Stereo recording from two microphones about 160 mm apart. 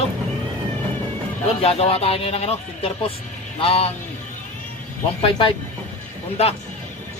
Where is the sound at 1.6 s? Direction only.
40° left (ahead or behind).